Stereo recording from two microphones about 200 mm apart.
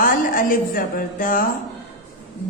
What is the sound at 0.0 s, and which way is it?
A woman's voice, 45° left (ahead or behind).